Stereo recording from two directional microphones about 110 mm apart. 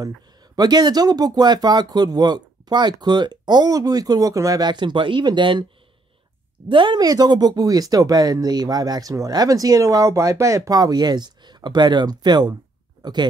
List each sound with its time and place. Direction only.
0.0 s speech: 40° right (ahead or behind)
6.7 s speech: 45° right (ahead or behind)